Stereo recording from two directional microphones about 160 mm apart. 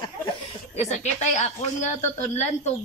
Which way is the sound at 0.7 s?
45° left (ahead or behind).